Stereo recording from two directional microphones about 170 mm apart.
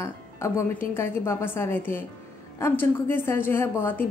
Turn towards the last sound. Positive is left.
turn(degrees=15)  # may be behind; listen again after turning